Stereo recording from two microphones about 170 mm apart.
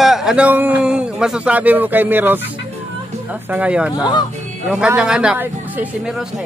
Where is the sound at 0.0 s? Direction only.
Centre (ahead or behind).